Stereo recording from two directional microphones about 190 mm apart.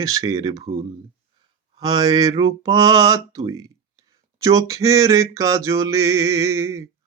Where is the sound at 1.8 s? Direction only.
20° right (ahead or behind).